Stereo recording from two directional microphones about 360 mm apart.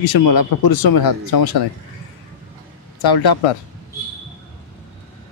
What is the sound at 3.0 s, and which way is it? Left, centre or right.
Speech, left.